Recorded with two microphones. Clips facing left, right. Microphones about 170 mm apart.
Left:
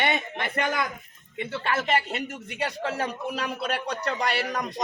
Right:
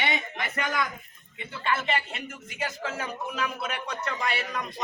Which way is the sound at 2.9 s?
35° left (ahead or behind).